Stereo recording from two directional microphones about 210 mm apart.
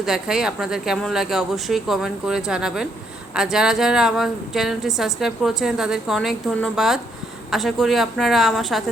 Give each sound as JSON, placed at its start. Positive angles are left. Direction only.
{"t": 0.0, "sound": "a woman's voice", "side_deg": 0}